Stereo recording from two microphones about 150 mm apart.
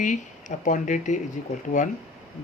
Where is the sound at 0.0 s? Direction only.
55° left (ahead or behind).